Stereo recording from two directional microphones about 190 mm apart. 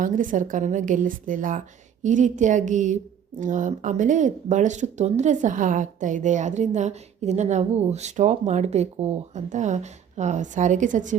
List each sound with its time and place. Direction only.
0.0 s a woman's voice: 45° right (ahead or behind)